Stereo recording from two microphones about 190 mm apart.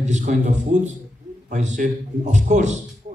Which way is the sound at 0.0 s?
40° right (ahead or behind).